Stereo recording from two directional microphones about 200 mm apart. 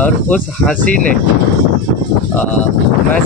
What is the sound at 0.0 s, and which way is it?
Speech, 5° left (ahead or behind).